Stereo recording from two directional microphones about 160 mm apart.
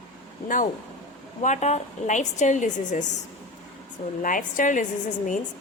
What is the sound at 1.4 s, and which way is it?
A woman's voice, 45° left (ahead or behind).